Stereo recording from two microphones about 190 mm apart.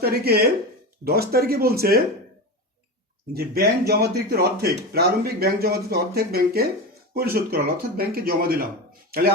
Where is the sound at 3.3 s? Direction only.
55° right (ahead or behind).